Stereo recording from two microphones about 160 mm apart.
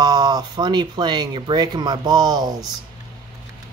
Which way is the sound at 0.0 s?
25° right (ahead or behind).